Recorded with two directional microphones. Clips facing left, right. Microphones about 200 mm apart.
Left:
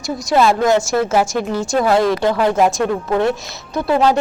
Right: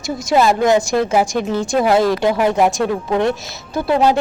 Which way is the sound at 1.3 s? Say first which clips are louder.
Right 1 dB; 5° left (ahead or behind).